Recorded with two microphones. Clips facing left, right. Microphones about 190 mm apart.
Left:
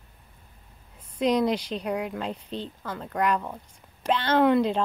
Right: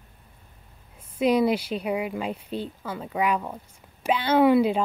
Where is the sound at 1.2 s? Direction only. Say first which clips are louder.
Right 2 dB; 5° right (ahead or behind).